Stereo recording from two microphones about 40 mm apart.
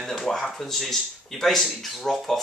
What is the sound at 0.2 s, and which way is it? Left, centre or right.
Speech, centre.